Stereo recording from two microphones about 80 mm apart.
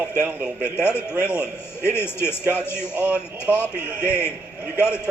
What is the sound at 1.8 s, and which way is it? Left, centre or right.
Speech, left.